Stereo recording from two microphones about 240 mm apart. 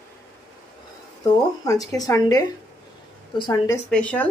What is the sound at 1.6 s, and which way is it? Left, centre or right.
Speech, centre.